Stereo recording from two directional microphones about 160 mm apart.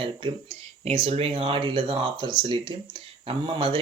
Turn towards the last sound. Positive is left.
turn(degrees=-35)  # may be behind; listen again after turning